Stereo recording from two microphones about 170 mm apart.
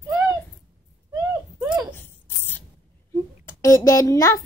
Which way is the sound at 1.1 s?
20° right (ahead or behind).